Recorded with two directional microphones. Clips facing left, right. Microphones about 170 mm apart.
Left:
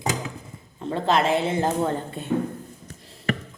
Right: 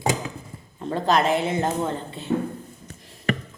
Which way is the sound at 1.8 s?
50° left (ahead or behind).